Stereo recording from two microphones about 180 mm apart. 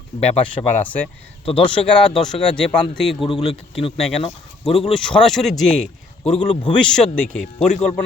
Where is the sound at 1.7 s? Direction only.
5° left (ahead or behind).